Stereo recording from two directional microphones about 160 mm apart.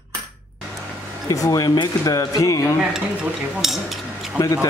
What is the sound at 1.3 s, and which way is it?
Speech, 20° left (ahead or behind).